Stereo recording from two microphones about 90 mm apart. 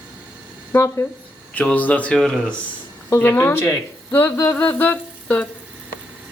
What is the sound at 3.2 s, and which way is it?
Speech, 25° left (ahead or behind).